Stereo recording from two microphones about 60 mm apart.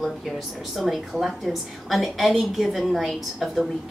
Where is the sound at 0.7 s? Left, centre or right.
Centre.